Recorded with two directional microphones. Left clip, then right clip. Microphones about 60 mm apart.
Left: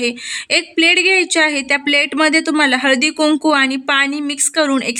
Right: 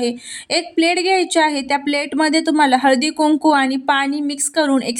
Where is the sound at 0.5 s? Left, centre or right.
Right.